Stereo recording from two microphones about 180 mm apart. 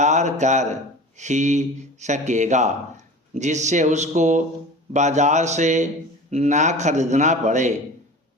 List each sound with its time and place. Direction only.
0.0 s speech: 40° right (ahead or behind)